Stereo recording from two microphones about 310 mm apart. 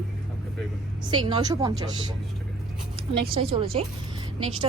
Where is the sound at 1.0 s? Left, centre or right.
Centre.